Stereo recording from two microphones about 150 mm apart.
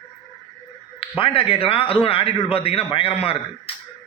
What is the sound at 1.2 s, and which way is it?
A man's voice, 35° left (ahead or behind).